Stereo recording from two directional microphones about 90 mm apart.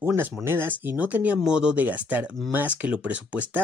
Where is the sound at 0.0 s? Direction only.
25° right (ahead or behind).